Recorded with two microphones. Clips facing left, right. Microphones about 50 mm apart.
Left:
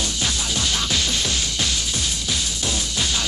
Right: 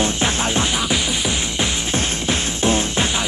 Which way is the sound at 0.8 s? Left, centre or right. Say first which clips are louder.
Right 3 dB; centre.